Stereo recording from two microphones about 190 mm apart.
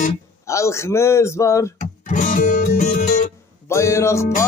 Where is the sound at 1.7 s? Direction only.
40° left (ahead or behind).